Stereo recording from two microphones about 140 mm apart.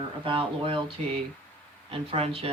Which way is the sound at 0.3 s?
40° right (ahead or behind).